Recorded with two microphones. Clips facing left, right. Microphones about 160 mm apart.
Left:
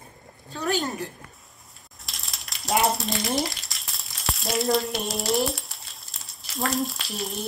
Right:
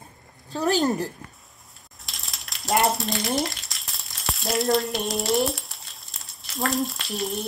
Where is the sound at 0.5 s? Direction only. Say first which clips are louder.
Right 5 dB; 40° right (ahead or behind).